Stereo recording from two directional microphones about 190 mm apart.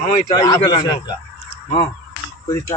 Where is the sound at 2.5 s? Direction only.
15° left (ahead or behind).